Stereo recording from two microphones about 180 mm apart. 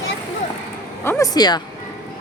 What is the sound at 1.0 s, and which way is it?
Speech, 15° left (ahead or behind).